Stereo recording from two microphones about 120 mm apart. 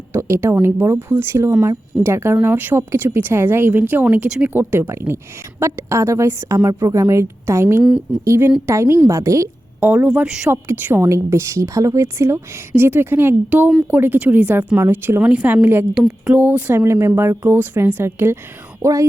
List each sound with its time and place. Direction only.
0.1 s a woman's voice: 20° right (ahead or behind)
9.8 s speech: 10° right (ahead or behind)
10.5 s a woman's voice: 20° right (ahead or behind)